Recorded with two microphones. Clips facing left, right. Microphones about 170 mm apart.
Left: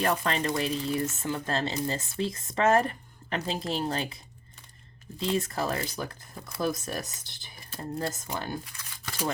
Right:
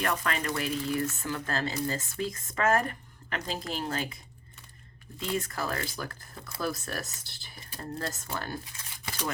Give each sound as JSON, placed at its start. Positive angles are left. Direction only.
{"t": 0.0, "sound": "speech", "side_deg": 30}
{"t": 5.2, "sound": "speech", "side_deg": 25}